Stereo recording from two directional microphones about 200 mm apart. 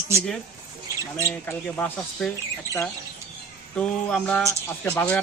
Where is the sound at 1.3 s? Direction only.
10° left (ahead or behind).